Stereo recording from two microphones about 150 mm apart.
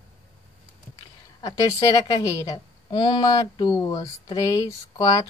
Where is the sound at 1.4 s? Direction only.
25° left (ahead or behind).